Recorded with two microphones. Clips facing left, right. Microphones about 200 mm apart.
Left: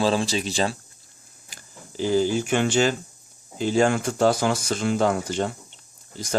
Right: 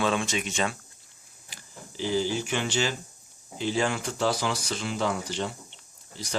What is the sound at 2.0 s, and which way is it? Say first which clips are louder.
Speech: left 6 dB; 50° left (ahead or behind).